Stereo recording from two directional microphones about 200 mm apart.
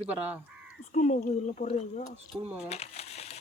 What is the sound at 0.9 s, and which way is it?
A woman's voice, 40° left (ahead or behind).